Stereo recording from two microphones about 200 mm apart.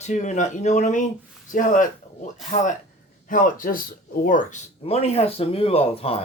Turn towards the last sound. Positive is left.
turn(degrees=30)  # may be behind; listen again after turning